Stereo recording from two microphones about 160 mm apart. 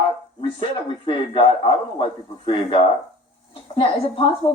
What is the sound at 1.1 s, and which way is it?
A man's voice, 35° left (ahead or behind).